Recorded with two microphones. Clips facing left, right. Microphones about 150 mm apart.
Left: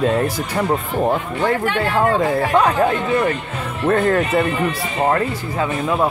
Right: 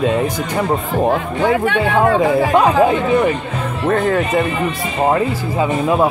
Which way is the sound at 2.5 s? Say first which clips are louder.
Right 2 dB; 10° right (ahead or behind).